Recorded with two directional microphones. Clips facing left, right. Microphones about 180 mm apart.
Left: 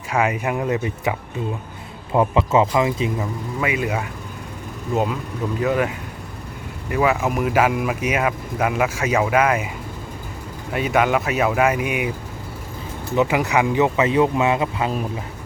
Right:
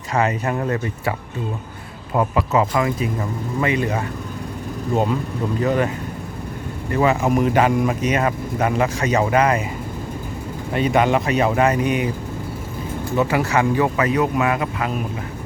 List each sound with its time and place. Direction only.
0.1 s speech: 10° left (ahead or behind)
2.1 s speech: 25° left (ahead or behind)
3.6 s speech: 5° left (ahead or behind)
5.6 s speech: 5° left (ahead or behind)
6.9 s speech: 5° left (ahead or behind)
10.8 s speech: 5° left (ahead or behind)
13.1 s speech: 15° left (ahead or behind)